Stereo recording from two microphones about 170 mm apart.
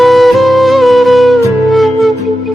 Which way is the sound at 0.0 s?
Centre (ahead or behind).